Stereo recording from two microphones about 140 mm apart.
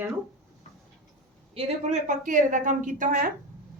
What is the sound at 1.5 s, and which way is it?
A woman's voice, 60° right (ahead or behind).